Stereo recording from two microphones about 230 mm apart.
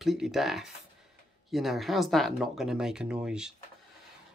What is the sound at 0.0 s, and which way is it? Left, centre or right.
Speech, centre.